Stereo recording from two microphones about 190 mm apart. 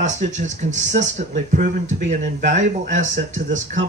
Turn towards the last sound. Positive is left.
turn(degrees=-40)  # may be behind; listen again after turning